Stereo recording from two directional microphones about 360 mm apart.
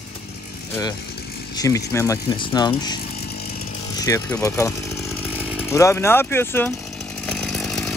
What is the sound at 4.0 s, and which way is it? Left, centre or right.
Speech, centre.